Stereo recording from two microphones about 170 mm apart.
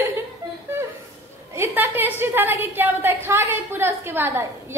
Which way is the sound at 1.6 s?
10° right (ahead or behind).